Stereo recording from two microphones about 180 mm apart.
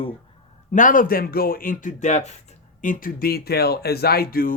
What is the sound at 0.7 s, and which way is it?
Speech, 45° left (ahead or behind).